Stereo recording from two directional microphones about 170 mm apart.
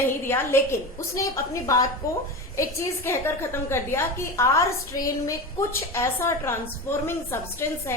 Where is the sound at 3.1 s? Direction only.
15° left (ahead or behind).